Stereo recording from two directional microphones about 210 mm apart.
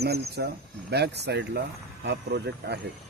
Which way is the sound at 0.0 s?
50° right (ahead or behind).